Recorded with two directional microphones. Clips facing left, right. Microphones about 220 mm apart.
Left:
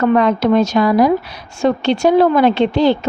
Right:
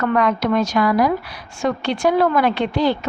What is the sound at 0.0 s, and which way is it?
A woman's voice, 25° left (ahead or behind).